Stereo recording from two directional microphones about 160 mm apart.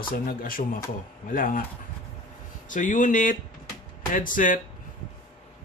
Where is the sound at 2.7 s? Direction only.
55° left (ahead or behind).